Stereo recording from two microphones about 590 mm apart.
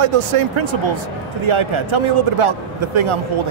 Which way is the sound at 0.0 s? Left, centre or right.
Right.